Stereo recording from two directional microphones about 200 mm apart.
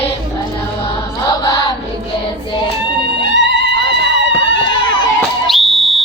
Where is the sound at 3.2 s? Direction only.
65° left (ahead or behind).